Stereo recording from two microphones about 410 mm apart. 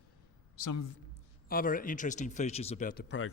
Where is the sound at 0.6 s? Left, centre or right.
Left.